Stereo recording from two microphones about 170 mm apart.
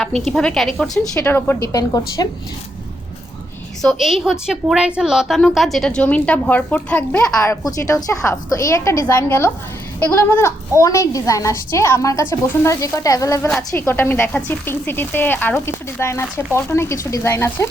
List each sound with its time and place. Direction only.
0.0 s a woman's voice: 5° left (ahead or behind); by 2.2 s 20° left (ahead or behind)
3.8 s a woman's voice: centre (ahead or behind)
7.4 s a woman's voice: 20° left (ahead or behind)